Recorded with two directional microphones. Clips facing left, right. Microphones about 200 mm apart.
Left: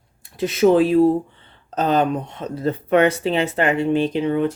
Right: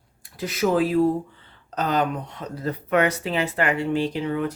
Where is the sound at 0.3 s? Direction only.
25° left (ahead or behind).